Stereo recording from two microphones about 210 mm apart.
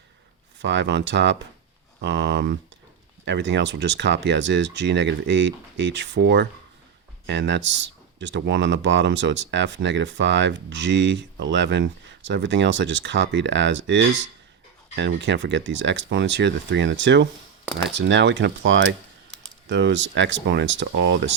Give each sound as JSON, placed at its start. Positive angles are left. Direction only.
{"t": 0.6, "sound": "speech", "side_deg": -60}